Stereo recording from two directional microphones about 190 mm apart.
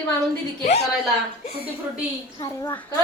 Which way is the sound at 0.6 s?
35° left (ahead or behind).